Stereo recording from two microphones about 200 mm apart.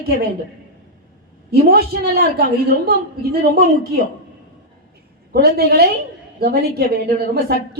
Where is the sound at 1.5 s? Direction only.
50° right (ahead or behind).